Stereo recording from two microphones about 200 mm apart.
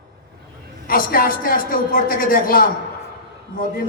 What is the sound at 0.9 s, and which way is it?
A woman's voice, 45° left (ahead or behind).